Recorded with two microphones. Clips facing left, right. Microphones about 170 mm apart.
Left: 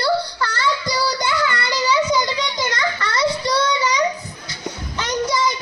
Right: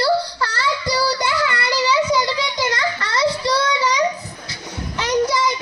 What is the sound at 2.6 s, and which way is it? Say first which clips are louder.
Child singing: right 1 dB; 30° right (ahead or behind).